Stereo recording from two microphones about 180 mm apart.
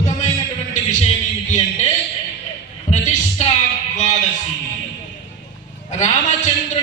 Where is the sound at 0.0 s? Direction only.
40° left (ahead or behind).